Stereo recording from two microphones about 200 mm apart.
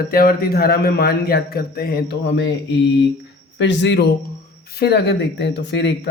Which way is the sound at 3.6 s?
60° left (ahead or behind).